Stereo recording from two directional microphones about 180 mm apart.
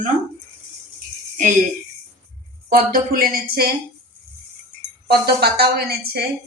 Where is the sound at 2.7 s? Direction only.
55° right (ahead or behind).